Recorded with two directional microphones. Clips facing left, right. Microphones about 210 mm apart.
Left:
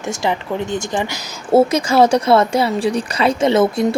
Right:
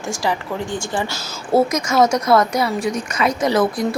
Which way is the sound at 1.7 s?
30° left (ahead or behind).